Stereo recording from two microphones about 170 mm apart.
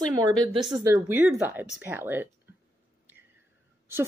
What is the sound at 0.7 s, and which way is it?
A woman's voice, 15° right (ahead or behind).